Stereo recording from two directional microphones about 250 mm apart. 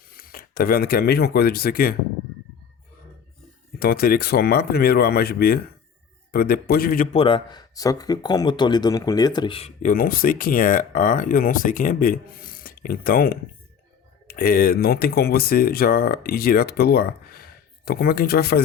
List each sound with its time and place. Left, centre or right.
0.1 s speech: left
3.8 s a man's voice: left